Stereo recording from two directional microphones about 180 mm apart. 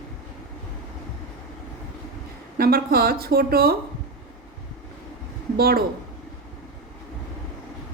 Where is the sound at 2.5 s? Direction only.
55° right (ahead or behind).